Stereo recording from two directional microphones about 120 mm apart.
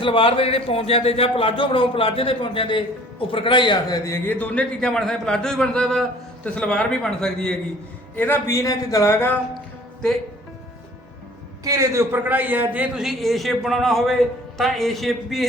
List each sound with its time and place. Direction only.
0.0 s speech: 45° left (ahead or behind); by 4.4 s 25° left (ahead or behind)
4.4 s a man's voice: 10° left (ahead or behind)
8.1 s a man's voice: 20° left (ahead or behind)
9.6 s a sound: 5° left (ahead or behind)
11.6 s a man's voice: 30° right (ahead or behind); by 15.4 s centre (ahead or behind)